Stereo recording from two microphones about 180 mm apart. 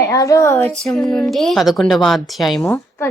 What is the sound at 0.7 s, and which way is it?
Speech, centre (ahead or behind).